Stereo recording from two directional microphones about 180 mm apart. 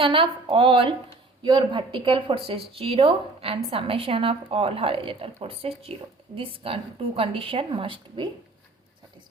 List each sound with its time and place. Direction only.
0.0 s a woman's voice: 30° right (ahead or behind)